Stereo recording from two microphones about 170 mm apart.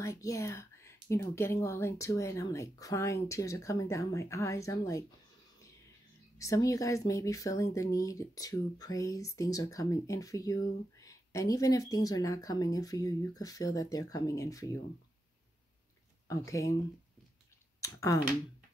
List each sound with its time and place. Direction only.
0.0 s speech: 20° left (ahead or behind)
6.3 s speech: 20° left (ahead or behind)
16.3 s speech: 20° left (ahead or behind)
17.7 s speech: 20° left (ahead or behind)